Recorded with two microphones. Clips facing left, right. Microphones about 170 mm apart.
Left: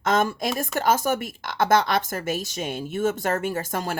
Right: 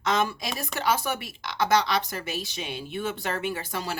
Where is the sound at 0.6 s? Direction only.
45° left (ahead or behind).